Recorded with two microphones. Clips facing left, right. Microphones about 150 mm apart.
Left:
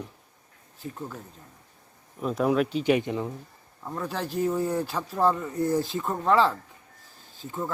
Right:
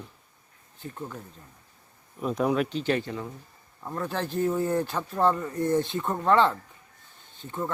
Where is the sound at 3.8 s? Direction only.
Centre (ahead or behind).